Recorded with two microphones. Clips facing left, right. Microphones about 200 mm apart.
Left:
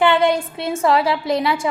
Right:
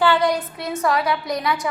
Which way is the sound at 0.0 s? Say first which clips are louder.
Left 3 dB; 25° left (ahead or behind).